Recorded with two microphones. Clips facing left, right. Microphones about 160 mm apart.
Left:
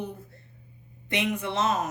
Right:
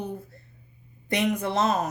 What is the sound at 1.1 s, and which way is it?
Speech, 40° right (ahead or behind).